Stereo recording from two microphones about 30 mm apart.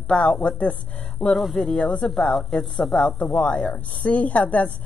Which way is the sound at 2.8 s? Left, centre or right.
Centre.